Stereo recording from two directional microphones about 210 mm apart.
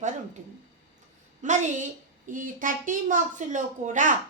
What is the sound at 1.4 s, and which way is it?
A woman's voice, 35° right (ahead or behind).